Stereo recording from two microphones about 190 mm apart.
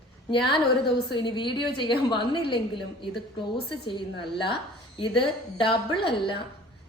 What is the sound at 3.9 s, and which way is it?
A woman's voice, 25° left (ahead or behind).